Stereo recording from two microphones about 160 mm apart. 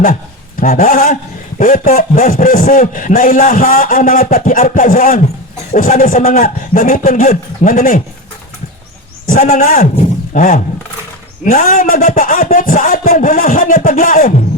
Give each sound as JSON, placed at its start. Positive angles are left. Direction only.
{"t": 0.0, "sound": "a man's voice", "side_deg": 60}
{"t": 9.2, "sound": "a man's voice", "side_deg": 60}